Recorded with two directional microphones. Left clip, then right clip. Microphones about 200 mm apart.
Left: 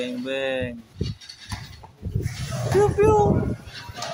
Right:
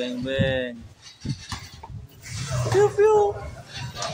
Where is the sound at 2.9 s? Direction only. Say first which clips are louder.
Even; 5° left (ahead or behind).